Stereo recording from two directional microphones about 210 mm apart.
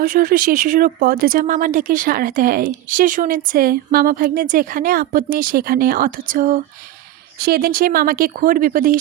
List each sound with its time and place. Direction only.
0.0 s speech: 45° right (ahead or behind)